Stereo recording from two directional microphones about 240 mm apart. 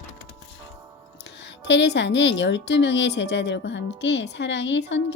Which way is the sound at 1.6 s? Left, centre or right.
Left.